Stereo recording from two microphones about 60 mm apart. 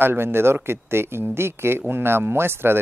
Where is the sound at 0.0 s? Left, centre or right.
Right.